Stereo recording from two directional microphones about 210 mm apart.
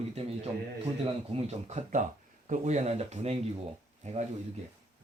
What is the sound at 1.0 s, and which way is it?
Speech, 30° right (ahead or behind).